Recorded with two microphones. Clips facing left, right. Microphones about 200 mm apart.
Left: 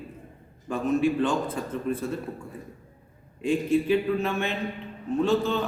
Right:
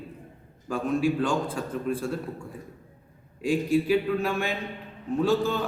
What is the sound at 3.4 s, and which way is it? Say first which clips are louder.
Speech: even; 10° right (ahead or behind).